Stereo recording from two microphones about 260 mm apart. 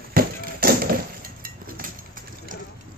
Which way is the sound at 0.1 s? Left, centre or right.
Right.